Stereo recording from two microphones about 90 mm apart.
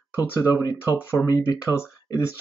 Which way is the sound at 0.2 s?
40° left (ahead or behind).